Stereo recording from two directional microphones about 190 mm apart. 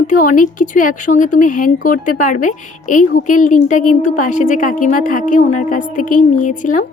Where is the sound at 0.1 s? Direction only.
45° left (ahead or behind).